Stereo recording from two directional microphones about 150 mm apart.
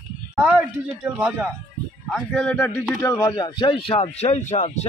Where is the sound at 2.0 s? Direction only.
5° left (ahead or behind).